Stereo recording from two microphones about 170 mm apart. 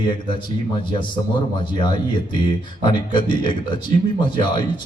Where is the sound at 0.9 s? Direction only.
30° left (ahead or behind).